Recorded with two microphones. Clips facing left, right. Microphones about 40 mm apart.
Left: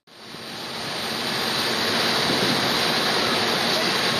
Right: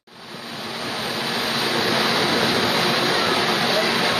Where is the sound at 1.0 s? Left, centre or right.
Centre.